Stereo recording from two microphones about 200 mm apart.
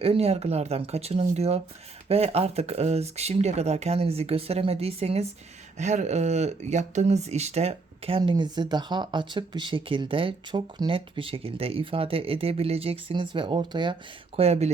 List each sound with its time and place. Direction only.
0.0 s speech: 30° right (ahead or behind)